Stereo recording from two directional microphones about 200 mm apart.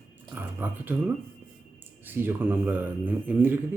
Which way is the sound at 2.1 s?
10° right (ahead or behind).